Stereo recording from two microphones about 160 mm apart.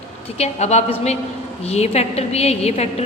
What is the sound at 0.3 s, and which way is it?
A woman's voice, 40° left (ahead or behind).